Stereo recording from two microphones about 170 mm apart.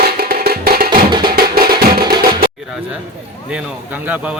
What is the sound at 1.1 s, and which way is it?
Music, 25° right (ahead or behind).